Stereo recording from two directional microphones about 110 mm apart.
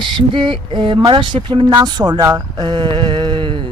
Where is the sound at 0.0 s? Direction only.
45° right (ahead or behind).